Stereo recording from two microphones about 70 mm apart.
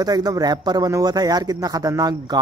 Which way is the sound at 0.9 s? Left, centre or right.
Right.